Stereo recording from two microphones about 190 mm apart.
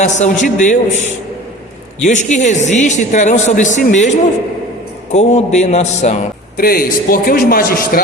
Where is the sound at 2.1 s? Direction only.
40° left (ahead or behind).